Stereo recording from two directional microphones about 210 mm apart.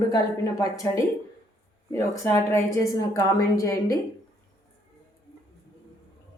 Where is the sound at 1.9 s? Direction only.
10° left (ahead or behind).